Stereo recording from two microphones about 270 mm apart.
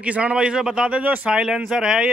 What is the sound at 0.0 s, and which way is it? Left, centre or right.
Speech, centre.